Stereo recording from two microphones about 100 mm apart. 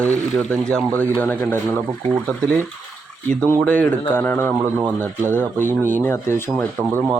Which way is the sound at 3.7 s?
15° left (ahead or behind).